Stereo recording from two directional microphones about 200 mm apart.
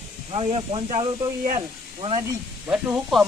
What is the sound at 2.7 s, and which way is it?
Speech, 5° right (ahead or behind).